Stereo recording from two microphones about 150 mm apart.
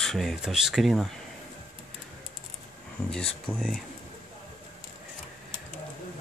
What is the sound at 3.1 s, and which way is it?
Speech, 5° left (ahead or behind).